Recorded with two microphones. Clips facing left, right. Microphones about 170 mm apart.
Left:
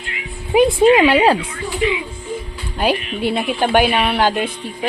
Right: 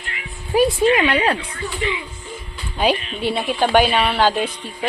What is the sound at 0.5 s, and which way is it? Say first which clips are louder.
Speech: left 4 dB; 20° left (ahead or behind).